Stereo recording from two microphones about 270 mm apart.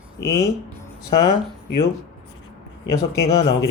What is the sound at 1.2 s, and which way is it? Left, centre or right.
Speech, left.